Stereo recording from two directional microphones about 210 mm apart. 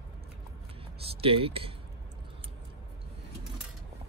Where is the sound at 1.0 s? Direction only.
25° right (ahead or behind).